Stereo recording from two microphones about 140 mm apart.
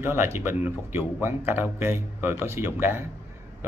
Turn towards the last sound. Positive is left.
turn(degrees=-15)  # may be behind; listen again after turning